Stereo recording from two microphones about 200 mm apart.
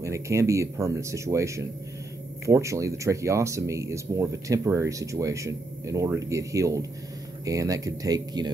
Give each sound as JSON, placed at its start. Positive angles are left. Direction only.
{"t": 0.0, "sound": "speech", "side_deg": -15}